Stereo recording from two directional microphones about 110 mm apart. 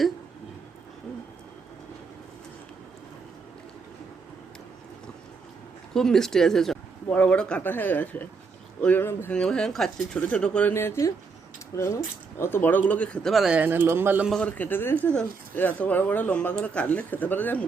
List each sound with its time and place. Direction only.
5.9 s speech: 5° left (ahead or behind)
9.3 s speech: 5° left (ahead or behind)
10.2 s speech: 15° left (ahead or behind)
13.6 s speech: 20° right (ahead or behind)
14.4 s speech: 15° left (ahead or behind)